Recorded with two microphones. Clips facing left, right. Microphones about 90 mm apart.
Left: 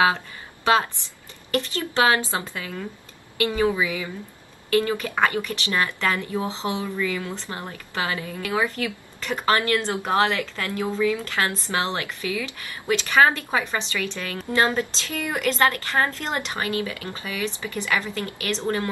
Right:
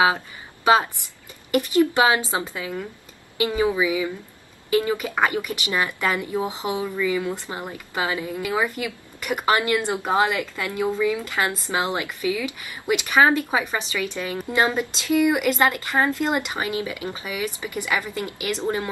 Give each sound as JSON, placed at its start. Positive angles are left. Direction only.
{"t": 1.5, "sound": "speech", "side_deg": -15}